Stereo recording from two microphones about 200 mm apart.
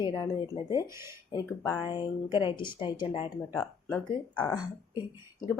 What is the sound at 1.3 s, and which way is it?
A woman's voice, 15° left (ahead or behind).